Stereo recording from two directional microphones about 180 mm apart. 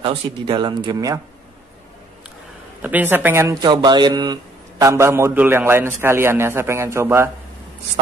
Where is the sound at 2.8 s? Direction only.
10° right (ahead or behind).